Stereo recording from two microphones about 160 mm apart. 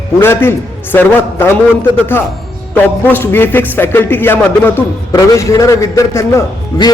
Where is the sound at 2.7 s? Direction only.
10° left (ahead or behind).